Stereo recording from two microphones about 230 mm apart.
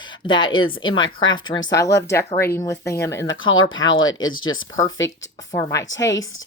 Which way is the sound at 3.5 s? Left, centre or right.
Left.